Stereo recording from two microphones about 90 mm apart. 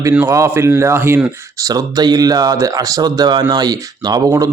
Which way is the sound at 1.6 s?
45° right (ahead or behind).